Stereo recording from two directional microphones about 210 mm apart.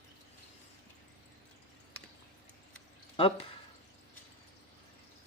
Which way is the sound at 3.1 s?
25° left (ahead or behind).